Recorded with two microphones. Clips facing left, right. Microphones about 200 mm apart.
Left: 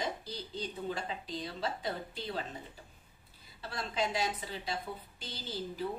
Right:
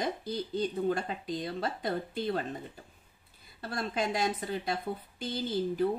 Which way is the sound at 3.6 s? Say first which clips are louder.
Right 3 dB; 50° right (ahead or behind).